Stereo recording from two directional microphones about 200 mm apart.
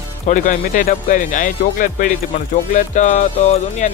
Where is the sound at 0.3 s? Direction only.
40° left (ahead or behind).